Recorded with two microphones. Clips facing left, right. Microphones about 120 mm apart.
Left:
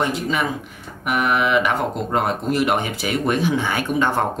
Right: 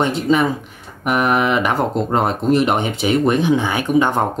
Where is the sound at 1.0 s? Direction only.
40° right (ahead or behind).